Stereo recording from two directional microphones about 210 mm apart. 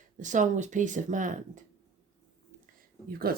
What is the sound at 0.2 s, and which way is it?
Speech, 35° right (ahead or behind).